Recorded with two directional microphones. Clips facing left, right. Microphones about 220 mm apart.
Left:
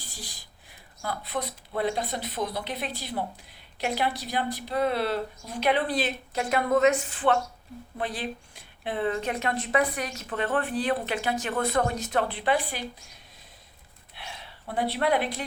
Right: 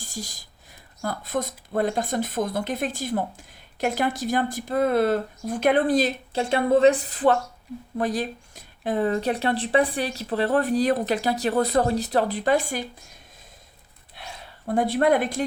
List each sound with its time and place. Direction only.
0.0 s a woman's voice: 45° right (ahead or behind)
14.2 s a sound: 45° right (ahead or behind)
14.7 s speech: 45° right (ahead or behind)